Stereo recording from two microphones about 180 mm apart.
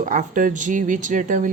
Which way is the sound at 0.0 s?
45° right (ahead or behind).